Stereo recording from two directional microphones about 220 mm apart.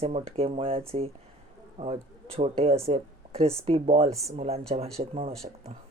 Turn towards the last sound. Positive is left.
turn(degrees=-25)  # may be behind; listen again after turning